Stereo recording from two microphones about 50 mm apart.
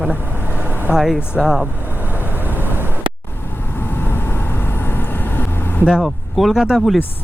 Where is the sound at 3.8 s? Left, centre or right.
Left.